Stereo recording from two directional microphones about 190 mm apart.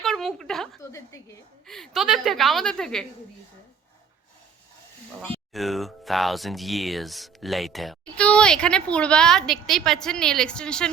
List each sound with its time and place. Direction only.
0.0 s speech: centre (ahead or behind)
0.8 s a woman's voice: 15° left (ahead or behind)
1.6 s speech: centre (ahead or behind)
5.2 s speech: centre (ahead or behind)